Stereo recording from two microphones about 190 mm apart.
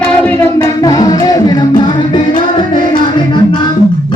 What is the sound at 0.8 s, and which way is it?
Music, 20° left (ahead or behind).